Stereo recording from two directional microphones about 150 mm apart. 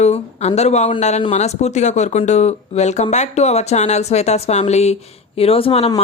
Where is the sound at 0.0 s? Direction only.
45° left (ahead or behind).